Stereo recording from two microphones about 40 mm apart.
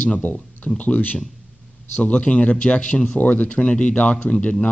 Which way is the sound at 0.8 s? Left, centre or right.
Left.